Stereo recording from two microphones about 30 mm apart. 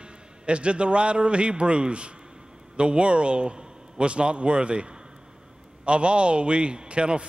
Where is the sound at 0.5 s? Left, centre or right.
Right.